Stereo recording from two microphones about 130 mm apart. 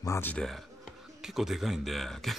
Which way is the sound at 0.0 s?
25° left (ahead or behind).